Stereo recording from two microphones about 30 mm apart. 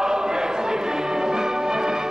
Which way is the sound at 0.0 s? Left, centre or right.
Centre.